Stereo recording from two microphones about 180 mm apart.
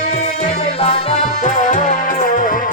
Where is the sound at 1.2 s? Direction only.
45° left (ahead or behind).